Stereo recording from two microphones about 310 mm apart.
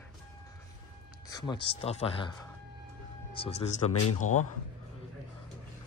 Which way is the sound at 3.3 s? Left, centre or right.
Centre.